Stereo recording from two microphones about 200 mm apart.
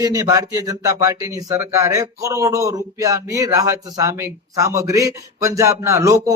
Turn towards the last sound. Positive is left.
turn(degrees=-15)  # may be behind; listen again after turning